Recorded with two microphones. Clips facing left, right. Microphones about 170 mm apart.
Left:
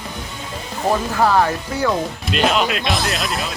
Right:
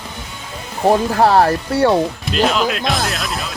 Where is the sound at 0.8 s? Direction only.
40° right (ahead or behind).